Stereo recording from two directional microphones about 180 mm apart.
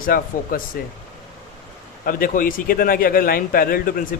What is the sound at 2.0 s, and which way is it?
A man's voice, 50° left (ahead or behind).